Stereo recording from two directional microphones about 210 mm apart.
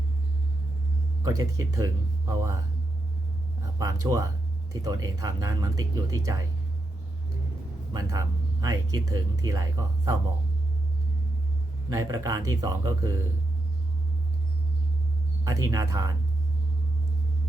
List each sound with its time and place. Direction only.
1.2 s speech: 15° right (ahead or behind)
4.0 s speech: 15° right (ahead or behind)
7.9 s speech: 15° right (ahead or behind)
11.9 s speech: 15° right (ahead or behind)
15.4 s speech: 15° right (ahead or behind)